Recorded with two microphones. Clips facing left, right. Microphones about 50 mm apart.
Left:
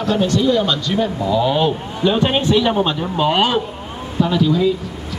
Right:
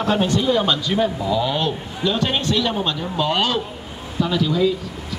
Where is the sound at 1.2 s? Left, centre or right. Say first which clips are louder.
Left 4 dB; centre.